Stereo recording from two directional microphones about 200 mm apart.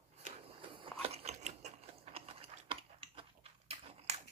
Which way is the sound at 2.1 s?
30° right (ahead or behind).